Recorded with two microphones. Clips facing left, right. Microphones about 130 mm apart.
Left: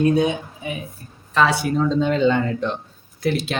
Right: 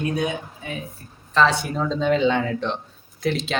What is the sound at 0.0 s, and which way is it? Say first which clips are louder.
Speech: left 7 dB; 25° left (ahead or behind).